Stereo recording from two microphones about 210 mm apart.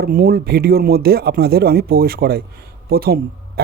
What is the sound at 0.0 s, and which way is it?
Speech, 45° right (ahead or behind).